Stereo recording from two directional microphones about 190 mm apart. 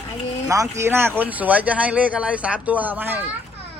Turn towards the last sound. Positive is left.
turn(degrees=-10)  # may be behind; listen again after turning